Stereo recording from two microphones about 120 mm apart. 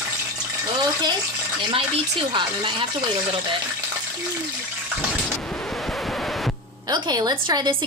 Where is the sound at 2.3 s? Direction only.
40° right (ahead or behind).